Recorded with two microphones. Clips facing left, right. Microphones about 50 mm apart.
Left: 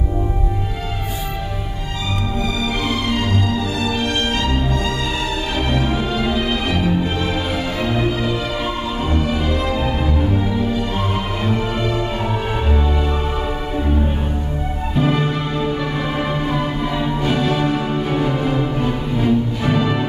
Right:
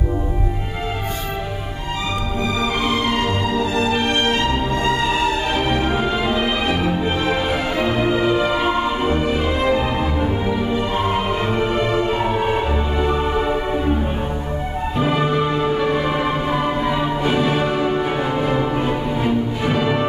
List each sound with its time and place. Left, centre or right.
2.4 s music: right
5.7 s music: centre
15.0 s music: centre